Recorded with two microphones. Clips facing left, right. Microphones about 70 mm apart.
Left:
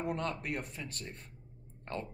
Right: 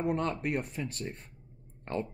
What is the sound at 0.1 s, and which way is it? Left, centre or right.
Speech, right.